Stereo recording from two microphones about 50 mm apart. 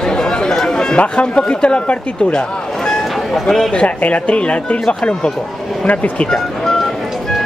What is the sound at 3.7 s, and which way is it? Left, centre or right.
Speech, left.